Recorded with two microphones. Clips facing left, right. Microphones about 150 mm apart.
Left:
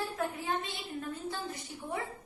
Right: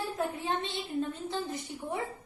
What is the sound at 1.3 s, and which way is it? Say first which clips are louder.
Speech: right 4 dB; 20° right (ahead or behind).